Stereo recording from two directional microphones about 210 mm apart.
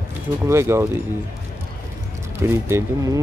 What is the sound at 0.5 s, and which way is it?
Speech, 10° right (ahead or behind).